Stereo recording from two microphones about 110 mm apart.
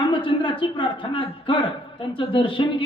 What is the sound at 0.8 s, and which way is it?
A man's voice, 45° left (ahead or behind).